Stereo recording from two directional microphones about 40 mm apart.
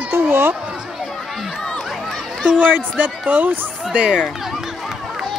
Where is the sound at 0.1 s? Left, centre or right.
Right.